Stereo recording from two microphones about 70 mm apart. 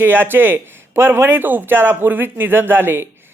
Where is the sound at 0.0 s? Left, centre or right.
Right.